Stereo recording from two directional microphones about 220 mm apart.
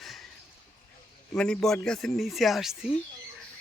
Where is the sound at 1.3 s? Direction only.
5° left (ahead or behind).